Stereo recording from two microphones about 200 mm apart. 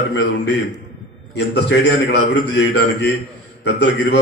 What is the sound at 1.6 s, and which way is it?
A man's voice, 60° left (ahead or behind).